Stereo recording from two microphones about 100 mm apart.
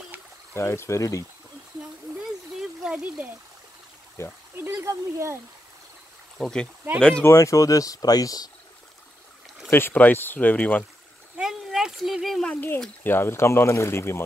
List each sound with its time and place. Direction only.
0.6 s speech: 25° left (ahead or behind)
2.1 s a sound: 5° right (ahead or behind)
4.2 s speech: 25° left (ahead or behind)
4.7 s speech: 30° right (ahead or behind)
6.3 s speech: 5° left (ahead or behind)
7.2 s speech: 30° left (ahead or behind)
9.7 s speech: 20° left (ahead or behind)
11.3 s a sound: 5° right (ahead or behind)
12.4 s speech: 15° left (ahead or behind)